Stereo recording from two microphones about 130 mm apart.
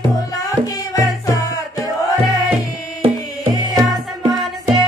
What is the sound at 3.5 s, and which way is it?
Music, 30° right (ahead or behind).